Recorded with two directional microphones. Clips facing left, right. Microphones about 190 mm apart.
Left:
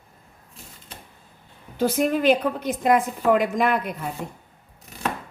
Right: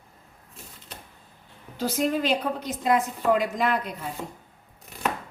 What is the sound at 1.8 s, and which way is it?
A woman's voice, 55° left (ahead or behind).